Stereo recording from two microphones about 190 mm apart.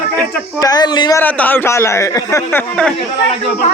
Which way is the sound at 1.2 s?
10° left (ahead or behind).